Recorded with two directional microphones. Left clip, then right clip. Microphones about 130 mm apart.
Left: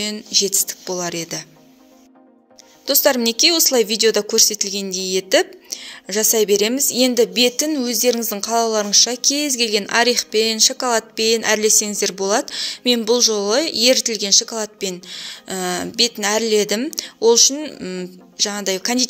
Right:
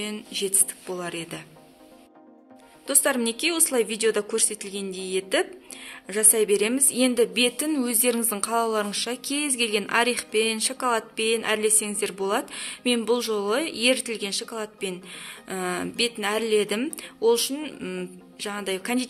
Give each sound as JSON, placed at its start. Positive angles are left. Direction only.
{"t": 0.0, "sound": "a woman's voice", "side_deg": 35}
{"t": 2.8, "sound": "a woman's voice", "side_deg": 40}
{"t": 18.4, "sound": "a woman's voice", "side_deg": 40}